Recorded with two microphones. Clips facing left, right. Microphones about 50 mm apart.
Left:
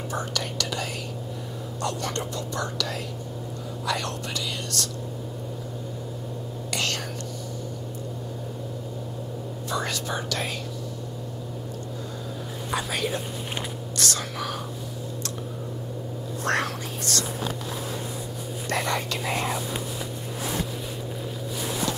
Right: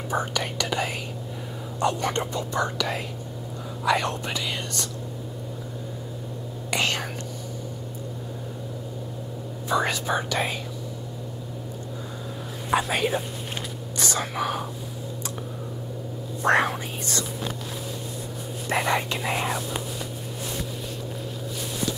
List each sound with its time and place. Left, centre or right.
0.1 s speech: centre
6.7 s whispering: centre
9.7 s speech: centre
12.7 s speech: right
16.4 s speech: centre
18.7 s speech: centre